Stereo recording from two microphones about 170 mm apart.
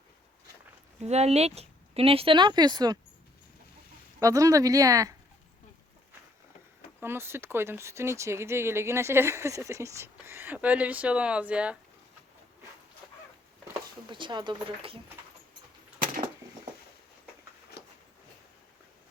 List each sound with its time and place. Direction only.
1.0 s speech: 40° right (ahead or behind); by 3.0 s 25° right (ahead or behind)
4.2 s speech: 20° right (ahead or behind)
7.0 s speech: 15° right (ahead or behind)
14.1 s speech: 30° right (ahead or behind)